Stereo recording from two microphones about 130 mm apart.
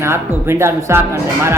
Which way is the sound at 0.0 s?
20° right (ahead or behind).